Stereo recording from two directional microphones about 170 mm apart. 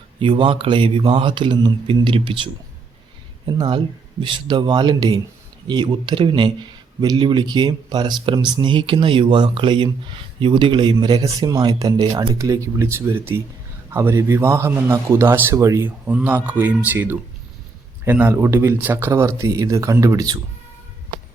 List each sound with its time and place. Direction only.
0.2 s a man's voice: 30° right (ahead or behind)